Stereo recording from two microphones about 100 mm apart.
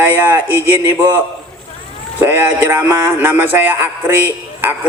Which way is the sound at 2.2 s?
20° right (ahead or behind).